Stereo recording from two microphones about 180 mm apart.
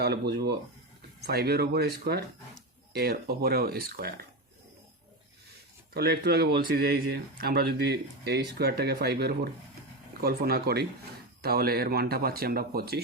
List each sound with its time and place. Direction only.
0.0 s speech: 65° right (ahead or behind)
5.9 s speech: 60° right (ahead or behind)